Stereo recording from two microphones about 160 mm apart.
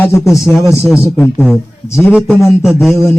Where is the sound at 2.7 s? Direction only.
Centre (ahead or behind).